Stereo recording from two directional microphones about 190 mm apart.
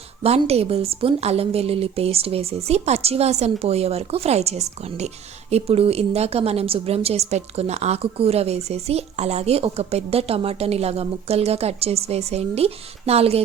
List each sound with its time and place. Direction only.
0.2 s a woman's voice: 30° right (ahead or behind)